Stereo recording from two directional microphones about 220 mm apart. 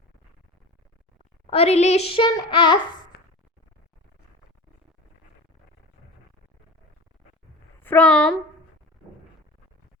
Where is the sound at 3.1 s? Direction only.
45° left (ahead or behind).